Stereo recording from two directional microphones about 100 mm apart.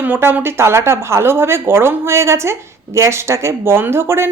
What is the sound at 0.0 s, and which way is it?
Speech, 20° right (ahead or behind).